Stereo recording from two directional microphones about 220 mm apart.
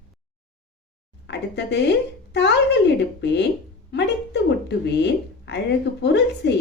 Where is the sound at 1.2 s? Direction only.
50° left (ahead or behind).